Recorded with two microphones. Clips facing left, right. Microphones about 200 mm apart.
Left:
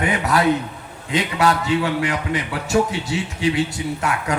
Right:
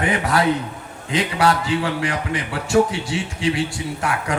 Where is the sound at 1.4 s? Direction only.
25° right (ahead or behind).